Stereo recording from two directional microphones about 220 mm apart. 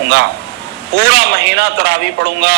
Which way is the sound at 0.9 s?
50° right (ahead or behind).